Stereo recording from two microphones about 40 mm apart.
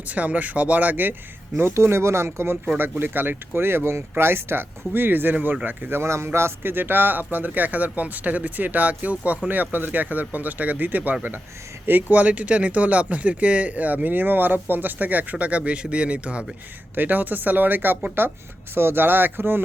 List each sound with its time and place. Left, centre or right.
0.0 s a man's voice: right
1.5 s speech: right
2.7 s speech: right
4.2 s speech: right
5.3 s a man's voice: right
5.9 s a man's voice: right
9.5 s a man's voice: right
12.1 s speech: right
16.9 s a man's voice: right
18.2 s speech: right
18.7 s speech: right